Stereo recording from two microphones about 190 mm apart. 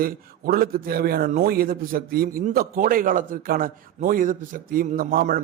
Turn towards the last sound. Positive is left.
turn(degrees=-50)  # may be behind; listen again after turning